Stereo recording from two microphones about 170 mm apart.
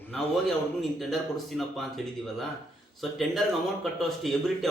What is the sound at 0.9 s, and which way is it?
Speech, centre (ahead or behind).